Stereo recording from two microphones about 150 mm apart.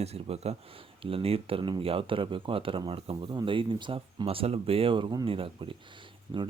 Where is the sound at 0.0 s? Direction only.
45° right (ahead or behind).